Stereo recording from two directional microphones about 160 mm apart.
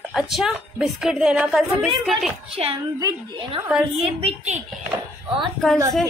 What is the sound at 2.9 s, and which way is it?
Speech, 30° right (ahead or behind).